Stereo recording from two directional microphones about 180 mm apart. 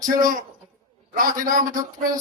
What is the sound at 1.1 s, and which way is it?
Speech, 50° right (ahead or behind).